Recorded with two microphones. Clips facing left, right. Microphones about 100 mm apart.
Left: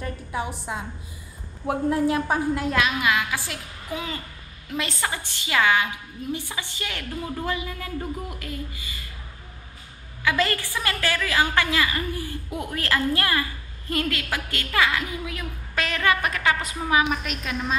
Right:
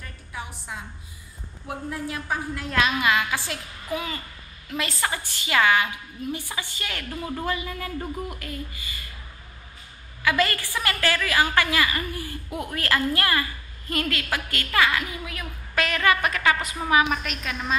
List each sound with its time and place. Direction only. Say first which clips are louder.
0.0 s a sound: left 8 dB; 30° left (ahead or behind)
1.9 s a woman's voice: left 10 dB; 35° left (ahead or behind)
2.7 s a woman's voice: right 4 dB; 5° left (ahead or behind)
5.0 s a woman's voice: right 1 dB; 15° left (ahead or behind)
10.2 s a woman's voice: even; 20° left (ahead or behind)